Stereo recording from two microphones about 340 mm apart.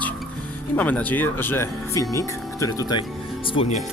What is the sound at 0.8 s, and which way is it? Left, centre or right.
Speech, centre.